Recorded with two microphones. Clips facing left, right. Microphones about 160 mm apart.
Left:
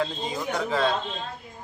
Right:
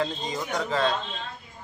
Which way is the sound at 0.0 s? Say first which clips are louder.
Left 1 dB; 5° left (ahead or behind).